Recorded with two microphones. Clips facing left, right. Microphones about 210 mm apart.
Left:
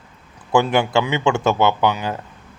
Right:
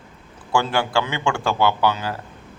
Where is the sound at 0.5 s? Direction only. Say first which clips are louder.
Left 4 dB; 20° left (ahead or behind).